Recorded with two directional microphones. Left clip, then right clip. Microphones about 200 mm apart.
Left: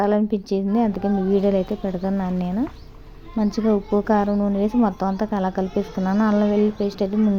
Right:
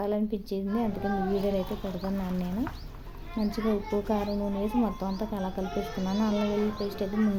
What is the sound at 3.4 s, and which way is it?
A woman's voice, 25° left (ahead or behind).